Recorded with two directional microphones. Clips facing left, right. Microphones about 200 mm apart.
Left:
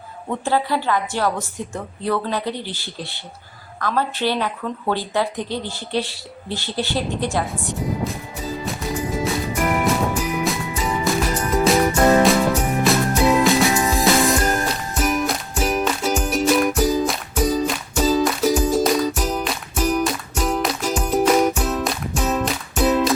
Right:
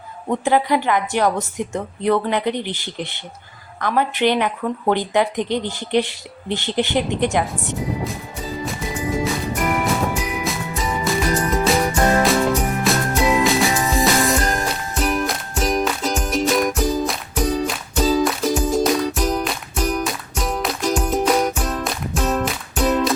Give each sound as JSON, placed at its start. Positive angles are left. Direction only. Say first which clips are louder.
{"t": 0.3, "sound": "speech", "louder": "right 4 dB", "side_deg": -15}
{"t": 8.0, "sound": "music", "louder": "left 1 dB", "side_deg": 0}
{"t": 10.4, "sound": "music", "louder": "left 1 dB", "side_deg": 0}